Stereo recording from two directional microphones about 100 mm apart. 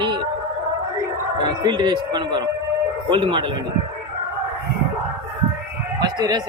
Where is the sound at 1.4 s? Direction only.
45° right (ahead or behind).